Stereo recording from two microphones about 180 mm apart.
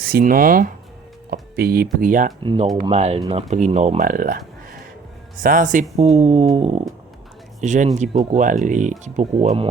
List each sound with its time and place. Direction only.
0.0 s speech: 55° right (ahead or behind)
2.4 s speech: 25° right (ahead or behind)
2.8 s a sound: 35° right (ahead or behind)
3.2 s speech: 35° right (ahead or behind)
6.0 s a sound: 35° right (ahead or behind)
7.6 s speech: 45° right (ahead or behind)